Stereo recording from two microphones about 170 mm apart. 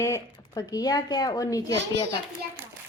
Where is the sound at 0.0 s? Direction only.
20° left (ahead or behind).